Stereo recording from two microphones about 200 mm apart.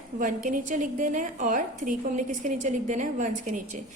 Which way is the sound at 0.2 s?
40° right (ahead or behind).